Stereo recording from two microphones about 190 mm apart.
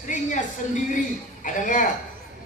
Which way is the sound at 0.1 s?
40° left (ahead or behind).